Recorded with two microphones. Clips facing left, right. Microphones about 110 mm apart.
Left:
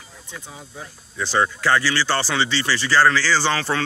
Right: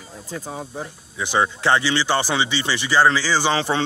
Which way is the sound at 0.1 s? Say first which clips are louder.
Right 9 dB; 40° right (ahead or behind).